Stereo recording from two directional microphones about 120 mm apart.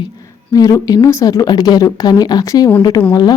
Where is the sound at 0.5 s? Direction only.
30° left (ahead or behind).